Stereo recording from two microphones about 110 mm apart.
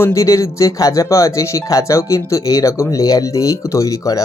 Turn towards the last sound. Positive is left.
turn(degrees=30)  # may be behind; listen again after turning